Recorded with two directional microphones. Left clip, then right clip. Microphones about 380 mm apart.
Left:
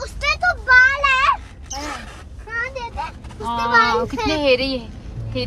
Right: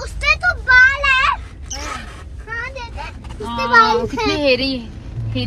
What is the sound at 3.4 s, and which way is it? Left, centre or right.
Speech, left.